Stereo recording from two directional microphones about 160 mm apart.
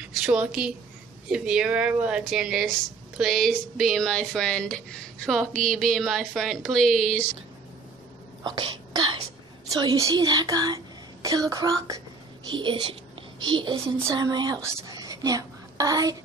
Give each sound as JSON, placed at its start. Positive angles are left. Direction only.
{"t": 0.2, "sound": "speech", "side_deg": -5}
{"t": 8.5, "sound": "a child's voice", "side_deg": -30}